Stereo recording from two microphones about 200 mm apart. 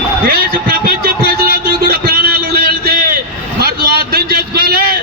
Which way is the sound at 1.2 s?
50° right (ahead or behind).